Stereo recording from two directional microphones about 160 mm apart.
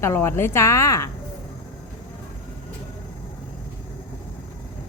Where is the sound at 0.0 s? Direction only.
15° left (ahead or behind).